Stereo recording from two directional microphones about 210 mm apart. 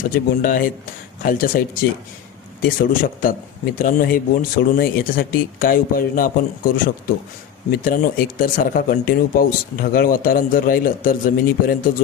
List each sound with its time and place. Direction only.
0.1 s a man's voice: 40° left (ahead or behind)